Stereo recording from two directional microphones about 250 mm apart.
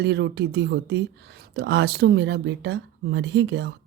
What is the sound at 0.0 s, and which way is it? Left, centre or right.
Speech, right.